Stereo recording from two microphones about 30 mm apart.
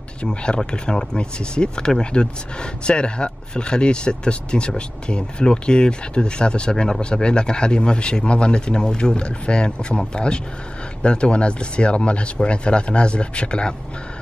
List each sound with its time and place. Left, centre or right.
0.2 s speech: left
6.7 s speech: left
7.0 s speech: left